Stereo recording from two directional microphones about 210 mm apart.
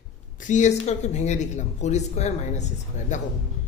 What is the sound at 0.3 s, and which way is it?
Speech, 35° left (ahead or behind).